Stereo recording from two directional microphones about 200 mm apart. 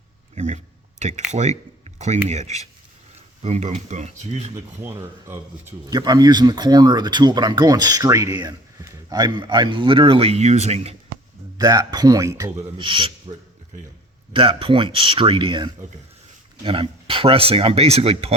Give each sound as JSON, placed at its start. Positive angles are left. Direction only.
{"t": 0.3, "sound": "a sound", "side_deg": -35}
{"t": 1.3, "sound": "speech", "side_deg": -35}
{"t": 4.5, "sound": "speech", "side_deg": -15}
{"t": 11.5, "sound": "speech", "side_deg": -20}
{"t": 12.5, "sound": "speech", "side_deg": -25}
{"t": 14.3, "sound": "speech", "side_deg": -25}